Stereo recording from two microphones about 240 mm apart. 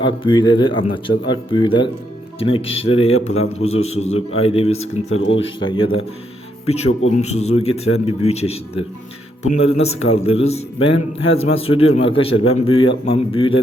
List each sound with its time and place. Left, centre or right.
0.2 s a man's voice: centre
7.1 s a man's voice: left
7.9 s speech: left
8.3 s a man's voice: left